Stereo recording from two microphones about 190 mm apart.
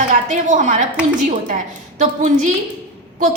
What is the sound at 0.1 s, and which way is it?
A woman's voice, 40° right (ahead or behind).